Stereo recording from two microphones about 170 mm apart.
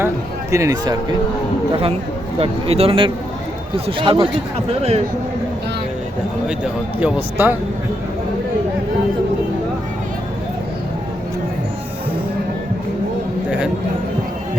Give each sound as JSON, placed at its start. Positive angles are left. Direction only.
{"t": 0.5, "sound": "speech", "side_deg": -20}
{"t": 2.4, "sound": "speech", "side_deg": -35}
{"t": 7.0, "sound": "speech", "side_deg": -10}